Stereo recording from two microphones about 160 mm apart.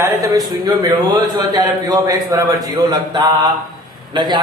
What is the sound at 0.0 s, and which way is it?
Speech, 20° right (ahead or behind).